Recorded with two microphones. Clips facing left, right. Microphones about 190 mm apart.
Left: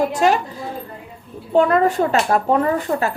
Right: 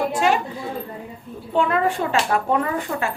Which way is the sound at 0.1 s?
40° left (ahead or behind).